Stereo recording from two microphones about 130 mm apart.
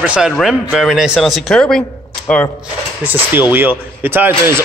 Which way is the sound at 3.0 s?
15° right (ahead or behind).